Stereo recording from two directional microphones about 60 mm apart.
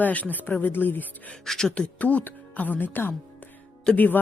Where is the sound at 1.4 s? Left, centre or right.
Centre.